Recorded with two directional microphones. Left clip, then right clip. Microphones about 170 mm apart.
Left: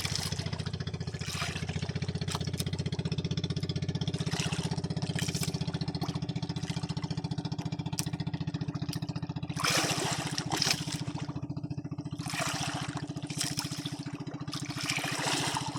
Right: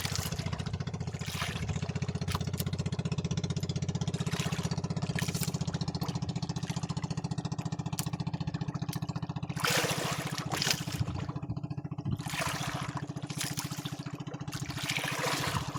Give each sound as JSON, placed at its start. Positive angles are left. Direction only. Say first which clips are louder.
{"t": 4.3, "sound": "vehicle", "louder": "left 2 dB", "side_deg": -30}
{"t": 9.6, "sound": "trickle", "louder": "left 1 dB", "side_deg": -30}
{"t": 12.4, "sound": "water", "louder": "left 1 dB", "side_deg": -30}
{"t": 14.8, "sound": "water", "louder": "even", "side_deg": -30}